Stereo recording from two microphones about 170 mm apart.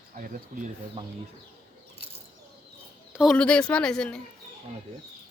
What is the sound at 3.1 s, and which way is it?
Speech, centre (ahead or behind).